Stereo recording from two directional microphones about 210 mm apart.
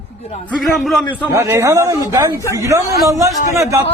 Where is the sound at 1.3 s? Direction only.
15° right (ahead or behind).